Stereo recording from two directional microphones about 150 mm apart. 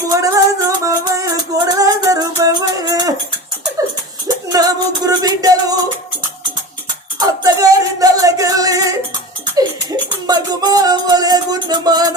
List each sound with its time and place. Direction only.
0.1 s music: 25° right (ahead or behind)
4.5 s music: 25° right (ahead or behind)
7.2 s music: 25° right (ahead or behind)
10.2 s music: 25° right (ahead or behind)